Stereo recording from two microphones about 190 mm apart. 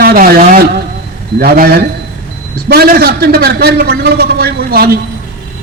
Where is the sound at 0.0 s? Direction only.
50° right (ahead or behind).